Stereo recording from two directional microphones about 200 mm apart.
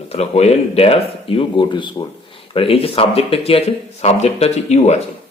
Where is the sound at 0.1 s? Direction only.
30° left (ahead or behind).